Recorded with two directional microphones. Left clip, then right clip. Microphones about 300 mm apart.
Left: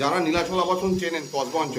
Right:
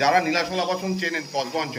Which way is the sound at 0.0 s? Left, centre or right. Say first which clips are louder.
Right 3 dB; centre.